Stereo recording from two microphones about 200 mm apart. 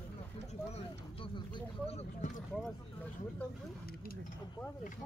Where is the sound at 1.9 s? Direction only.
30° left (ahead or behind).